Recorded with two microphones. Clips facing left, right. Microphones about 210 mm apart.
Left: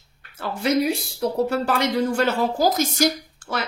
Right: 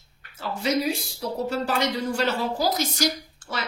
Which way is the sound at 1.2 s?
60° left (ahead or behind).